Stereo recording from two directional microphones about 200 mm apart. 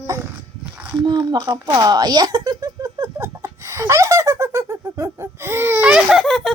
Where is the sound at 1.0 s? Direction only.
20° right (ahead or behind).